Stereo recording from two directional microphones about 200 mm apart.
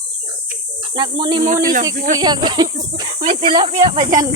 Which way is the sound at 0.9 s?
25° right (ahead or behind).